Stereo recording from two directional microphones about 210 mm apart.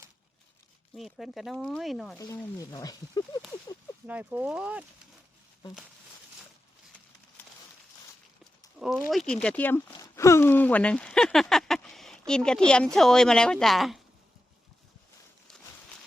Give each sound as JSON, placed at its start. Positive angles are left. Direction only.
{"t": 0.9, "sound": "speech", "side_deg": 0}
{"t": 2.1, "sound": "speech", "side_deg": 15}
{"t": 4.0, "sound": "speech", "side_deg": -5}
{"t": 8.8, "sound": "speech", "side_deg": 0}